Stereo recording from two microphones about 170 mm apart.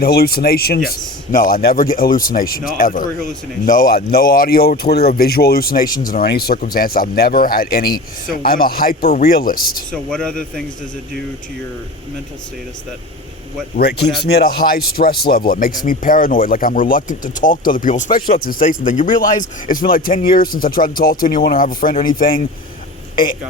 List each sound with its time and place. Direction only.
0.0 s speech: 65° left (ahead or behind)
9.9 s speech: 5° left (ahead or behind)
14.3 s speech: 65° left (ahead or behind)